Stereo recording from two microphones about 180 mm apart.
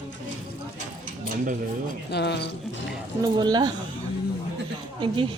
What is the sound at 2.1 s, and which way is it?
Speech, 70° left (ahead or behind).